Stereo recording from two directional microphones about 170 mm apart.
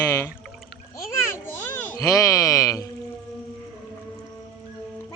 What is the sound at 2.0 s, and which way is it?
Music, 20° left (ahead or behind).